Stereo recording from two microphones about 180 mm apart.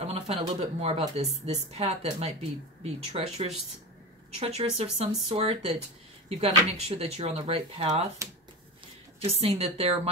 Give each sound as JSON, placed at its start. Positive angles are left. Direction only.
{"t": 0.0, "sound": "speech", "side_deg": -35}
{"t": 9.2, "sound": "speech", "side_deg": -30}